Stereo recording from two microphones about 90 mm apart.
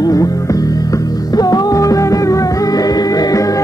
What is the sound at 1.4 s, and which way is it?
Music, 40° left (ahead or behind).